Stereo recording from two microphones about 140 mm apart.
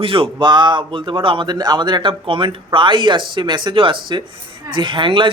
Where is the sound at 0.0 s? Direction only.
40° right (ahead or behind).